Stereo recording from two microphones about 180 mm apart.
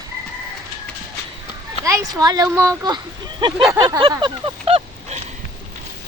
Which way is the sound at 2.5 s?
15° right (ahead or behind).